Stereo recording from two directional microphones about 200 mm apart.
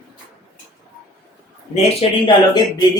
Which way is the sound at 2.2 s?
20° left (ahead or behind).